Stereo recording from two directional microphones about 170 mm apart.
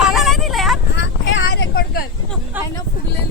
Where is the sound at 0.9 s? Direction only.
90° left; by 2.0 s 65° left (ahead or behind).